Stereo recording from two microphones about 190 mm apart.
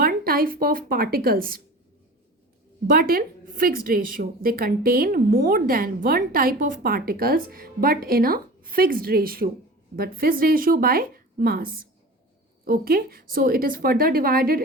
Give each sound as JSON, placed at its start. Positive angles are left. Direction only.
{"t": 0.0, "sound": "speech", "side_deg": -50}
{"t": 2.8, "sound": "a woman's voice", "side_deg": -50}